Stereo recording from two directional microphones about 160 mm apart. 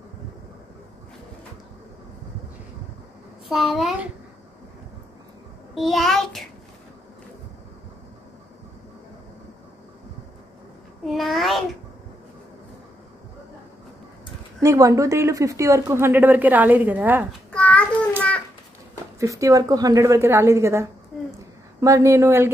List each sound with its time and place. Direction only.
3.4 s a child's voice: centre (ahead or behind)
5.8 s a child's voice: centre (ahead or behind)
11.1 s a sound: centre (ahead or behind)
14.6 s speech: 20° right (ahead or behind)
17.3 s a sound: 5° left (ahead or behind)
19.1 s a woman's voice: 20° right (ahead or behind)